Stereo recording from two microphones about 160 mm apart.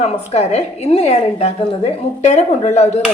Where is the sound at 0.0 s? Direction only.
40° left (ahead or behind).